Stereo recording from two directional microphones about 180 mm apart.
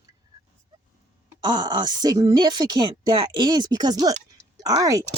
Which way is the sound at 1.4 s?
25° right (ahead or behind).